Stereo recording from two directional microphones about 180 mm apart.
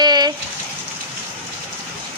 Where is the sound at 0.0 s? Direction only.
25° right (ahead or behind).